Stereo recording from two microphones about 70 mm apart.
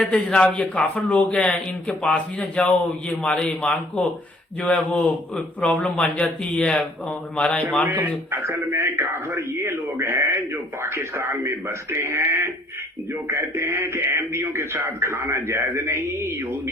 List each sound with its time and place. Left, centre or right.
0.0 s speech: centre
7.9 s a man's voice: right